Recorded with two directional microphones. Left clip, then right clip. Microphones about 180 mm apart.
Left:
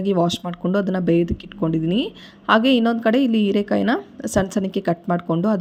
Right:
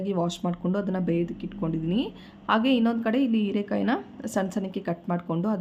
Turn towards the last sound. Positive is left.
turn(degrees=30)  # may be behind; listen again after turning